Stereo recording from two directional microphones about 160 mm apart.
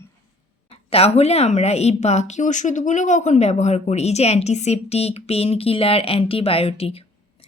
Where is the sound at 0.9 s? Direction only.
40° left (ahead or behind).